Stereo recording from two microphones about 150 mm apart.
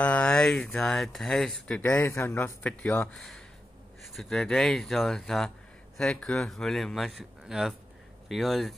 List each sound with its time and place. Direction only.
0.0 s speech: 10° left (ahead or behind)